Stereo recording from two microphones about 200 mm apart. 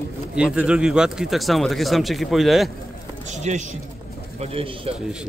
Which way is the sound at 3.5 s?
35° right (ahead or behind).